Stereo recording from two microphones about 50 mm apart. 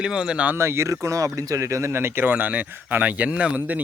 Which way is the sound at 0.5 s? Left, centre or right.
Right.